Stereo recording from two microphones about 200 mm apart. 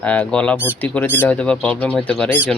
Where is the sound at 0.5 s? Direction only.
10° right (ahead or behind).